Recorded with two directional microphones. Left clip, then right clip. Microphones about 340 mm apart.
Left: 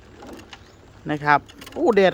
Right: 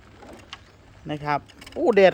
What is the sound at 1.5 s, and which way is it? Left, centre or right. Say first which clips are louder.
Speech: left 3 dB; centre.